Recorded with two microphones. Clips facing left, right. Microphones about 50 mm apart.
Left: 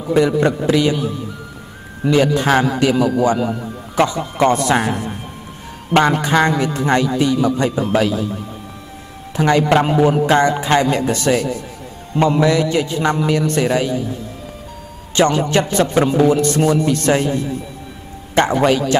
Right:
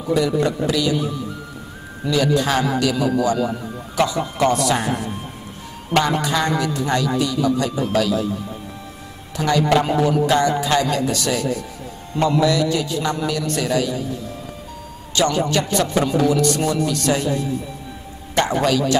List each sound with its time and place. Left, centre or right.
0.1 s a man's voice: left
2.0 s a man's voice: left
5.9 s a man's voice: left
9.3 s a man's voice: left
15.1 s a man's voice: left